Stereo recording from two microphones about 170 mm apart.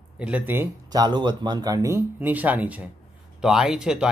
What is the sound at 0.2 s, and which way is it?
Speech, 10° right (ahead or behind).